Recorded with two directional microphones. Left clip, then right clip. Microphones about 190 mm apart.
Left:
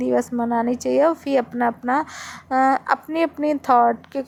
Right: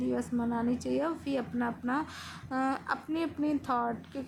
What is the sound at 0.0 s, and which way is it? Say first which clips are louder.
A woman's voice: left 12 dB; 35° left (ahead or behind).